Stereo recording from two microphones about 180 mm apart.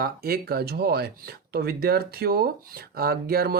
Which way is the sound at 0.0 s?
60° right (ahead or behind).